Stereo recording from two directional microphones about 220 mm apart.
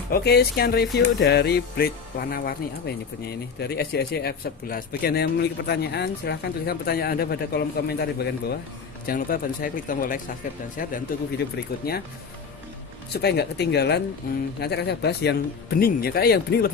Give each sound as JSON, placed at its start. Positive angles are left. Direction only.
{"t": 0.1, "sound": "speech", "side_deg": 45}
{"t": 3.5, "sound": "speech", "side_deg": 50}
{"t": 13.1, "sound": "speech", "side_deg": 50}